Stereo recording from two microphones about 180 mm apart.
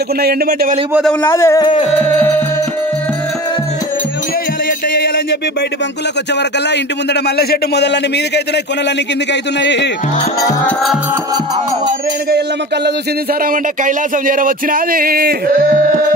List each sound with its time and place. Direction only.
0.2 s speech: 60° right (ahead or behind)
1.2 s speech: 15° left (ahead or behind)
7.2 s speech: 65° left (ahead or behind)
9.3 s speech: 75° left (ahead or behind)
13.5 s a sound: 50° right (ahead or behind)